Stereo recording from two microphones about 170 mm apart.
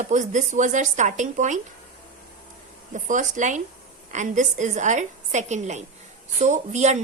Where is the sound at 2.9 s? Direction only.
45° right (ahead or behind).